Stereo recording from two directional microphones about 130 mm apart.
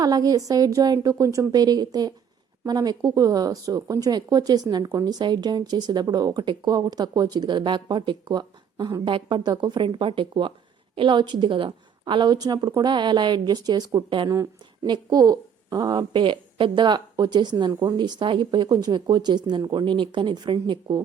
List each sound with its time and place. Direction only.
0.0 s a woman's voice: 30° right (ahead or behind)